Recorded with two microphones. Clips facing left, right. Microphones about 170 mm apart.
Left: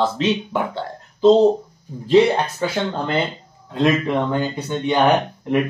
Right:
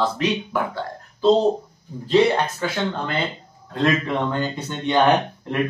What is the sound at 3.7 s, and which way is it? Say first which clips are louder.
A man's voice: left 3 dB; 15° left (ahead or behind).